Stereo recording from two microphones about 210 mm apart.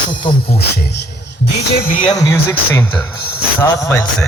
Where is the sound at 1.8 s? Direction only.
40° left (ahead or behind).